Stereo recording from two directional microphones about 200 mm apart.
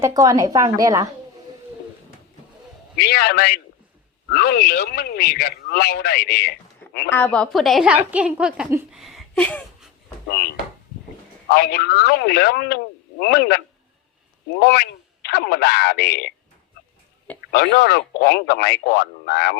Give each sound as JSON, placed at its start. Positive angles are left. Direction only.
{"t": 0.0, "sound": "a woman's voice", "side_deg": -15}
{"t": 2.9, "sound": "speech", "side_deg": 55}
{"t": 7.1, "sound": "a woman's voice", "side_deg": 10}
{"t": 10.2, "sound": "speech", "side_deg": 55}
{"t": 14.6, "sound": "speech", "side_deg": 55}
{"t": 17.5, "sound": "speech", "side_deg": 55}